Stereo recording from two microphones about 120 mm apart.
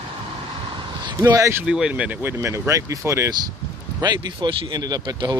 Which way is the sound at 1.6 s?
5° right (ahead or behind).